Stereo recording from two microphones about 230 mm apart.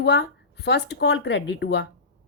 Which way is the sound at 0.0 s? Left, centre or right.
Left.